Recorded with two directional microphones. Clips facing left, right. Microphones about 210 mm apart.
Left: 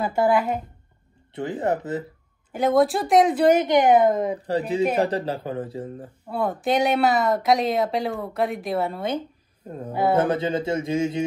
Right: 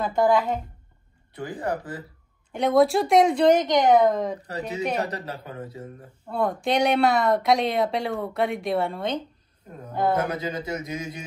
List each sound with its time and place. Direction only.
0.0 s speech: 10° left (ahead or behind)
1.3 s speech: 25° left (ahead or behind)
2.5 s speech: centre (ahead or behind)
4.5 s speech: 30° left (ahead or behind)
6.2 s speech: 5° left (ahead or behind)
10.1 s speech: 25° left (ahead or behind)